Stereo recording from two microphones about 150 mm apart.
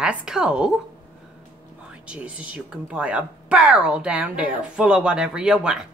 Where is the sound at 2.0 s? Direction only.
5° right (ahead or behind).